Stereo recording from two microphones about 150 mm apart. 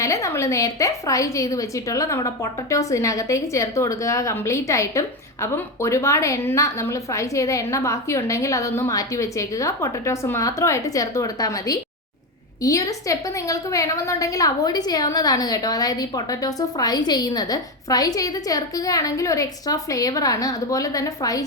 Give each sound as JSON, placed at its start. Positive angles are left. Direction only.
{"t": 0.0, "sound": "a woman's voice", "side_deg": 20}